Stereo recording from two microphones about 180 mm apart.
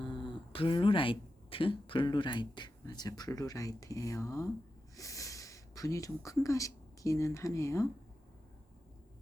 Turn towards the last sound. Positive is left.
turn(degrees=15)  # may be behind; listen again after turning